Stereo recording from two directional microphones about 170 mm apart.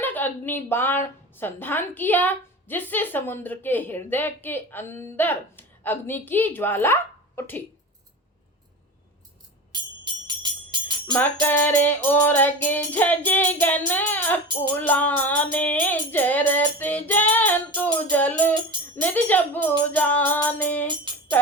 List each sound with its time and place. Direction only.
0.0 s a woman's voice: 10° left (ahead or behind)
9.7 s music: 25° right (ahead or behind)
11.2 s a woman's voice: 10° left (ahead or behind)
20.8 s music: 30° right (ahead or behind)